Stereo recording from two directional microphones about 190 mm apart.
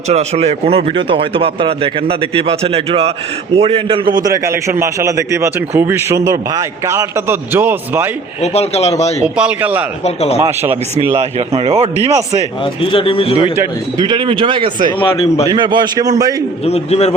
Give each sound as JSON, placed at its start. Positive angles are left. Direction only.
{"t": 0.1, "sound": "a man's voice", "side_deg": -35}
{"t": 8.4, "sound": "a man's voice", "side_deg": 35}
{"t": 9.2, "sound": "a man's voice", "side_deg": -5}
{"t": 10.0, "sound": "a man's voice", "side_deg": 35}
{"t": 10.4, "sound": "a man's voice", "side_deg": -10}
{"t": 11.2, "sound": "speech", "side_deg": -30}
{"t": 12.6, "sound": "speech", "side_deg": 25}
{"t": 13.6, "sound": "a man's voice", "side_deg": -20}
{"t": 14.9, "sound": "speech", "side_deg": 30}
{"t": 15.4, "sound": "a man's voice", "side_deg": -25}
{"t": 16.6, "sound": "a man's voice", "side_deg": 35}